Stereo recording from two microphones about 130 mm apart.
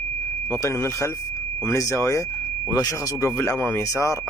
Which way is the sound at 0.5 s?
20° left (ahead or behind).